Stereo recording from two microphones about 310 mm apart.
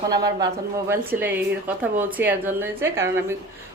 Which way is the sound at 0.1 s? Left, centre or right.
Centre.